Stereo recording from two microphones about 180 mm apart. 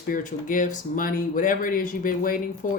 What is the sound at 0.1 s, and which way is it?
Speech, 50° left (ahead or behind).